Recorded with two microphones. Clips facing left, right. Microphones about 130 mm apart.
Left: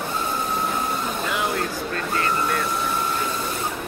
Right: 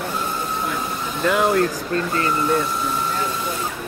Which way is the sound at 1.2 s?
50° right (ahead or behind).